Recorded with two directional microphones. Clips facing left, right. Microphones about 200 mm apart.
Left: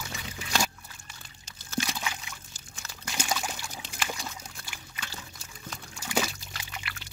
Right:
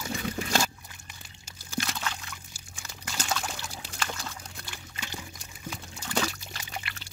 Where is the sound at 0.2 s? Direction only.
50° right (ahead or behind).